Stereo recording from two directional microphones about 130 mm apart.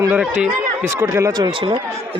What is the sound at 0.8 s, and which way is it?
Speech, 20° right (ahead or behind).